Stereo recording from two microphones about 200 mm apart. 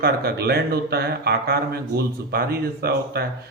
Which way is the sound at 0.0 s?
50° right (ahead or behind).